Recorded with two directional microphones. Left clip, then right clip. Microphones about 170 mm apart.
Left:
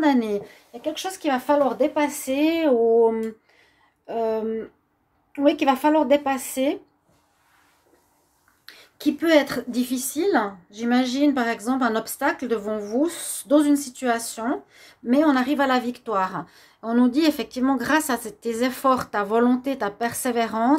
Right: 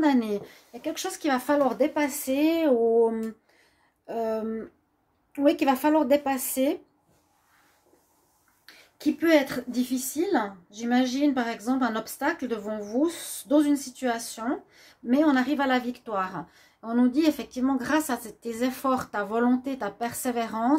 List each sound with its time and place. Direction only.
0.0 s speech: 5° left (ahead or behind)
8.9 s speech: 25° left (ahead or behind)